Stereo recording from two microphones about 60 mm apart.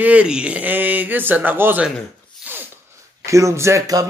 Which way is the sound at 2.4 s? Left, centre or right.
Right.